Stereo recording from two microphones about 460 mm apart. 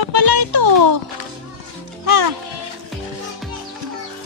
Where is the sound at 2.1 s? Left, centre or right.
Right.